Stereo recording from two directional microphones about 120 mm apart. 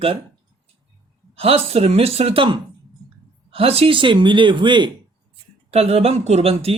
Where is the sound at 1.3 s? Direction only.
55° right (ahead or behind).